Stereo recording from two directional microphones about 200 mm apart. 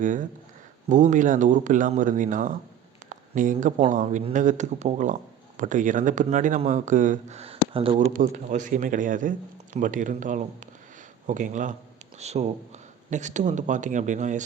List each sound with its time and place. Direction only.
0.0 s speech: 40° right (ahead or behind)